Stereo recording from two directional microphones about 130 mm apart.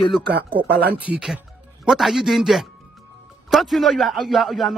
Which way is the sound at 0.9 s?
10° right (ahead or behind).